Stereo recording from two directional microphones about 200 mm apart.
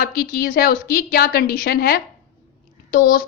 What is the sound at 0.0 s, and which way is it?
A woman's voice, 50° left (ahead or behind).